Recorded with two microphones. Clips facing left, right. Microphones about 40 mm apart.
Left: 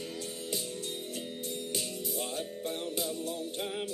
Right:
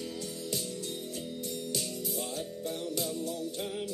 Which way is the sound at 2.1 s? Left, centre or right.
Left.